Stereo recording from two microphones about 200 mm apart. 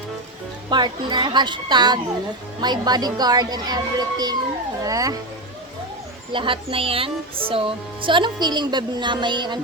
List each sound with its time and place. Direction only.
0.7 s speech: 20° right (ahead or behind)
6.3 s speech: 25° right (ahead or behind)